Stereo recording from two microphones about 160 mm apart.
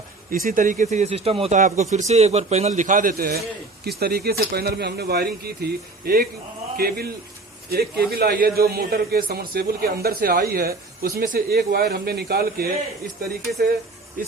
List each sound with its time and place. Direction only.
0.3 s a man's voice: 60° right (ahead or behind); by 1.5 s 40° right (ahead or behind)
1.5 s a man's voice: 50° right (ahead or behind); by 12.7 s 75° right (ahead or behind)
14.2 s speech: 60° right (ahead or behind)